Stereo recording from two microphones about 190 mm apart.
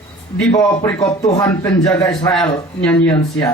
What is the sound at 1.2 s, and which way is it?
A man's voice, 15° left (ahead or behind).